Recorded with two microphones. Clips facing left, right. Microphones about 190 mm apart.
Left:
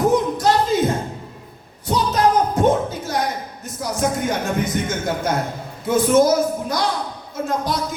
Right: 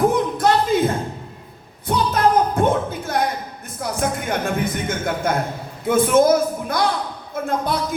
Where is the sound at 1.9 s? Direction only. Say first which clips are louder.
Even; 55° right (ahead or behind).